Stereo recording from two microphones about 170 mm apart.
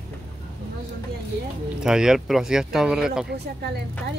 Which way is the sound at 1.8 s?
5° right (ahead or behind).